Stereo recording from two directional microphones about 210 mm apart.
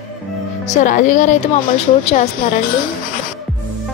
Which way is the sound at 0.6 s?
35° left (ahead or behind).